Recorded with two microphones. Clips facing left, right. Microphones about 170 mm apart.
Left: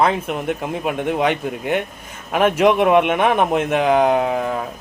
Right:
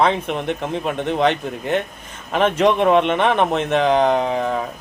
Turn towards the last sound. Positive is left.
turn(degrees=5)  # may be behind; listen again after turning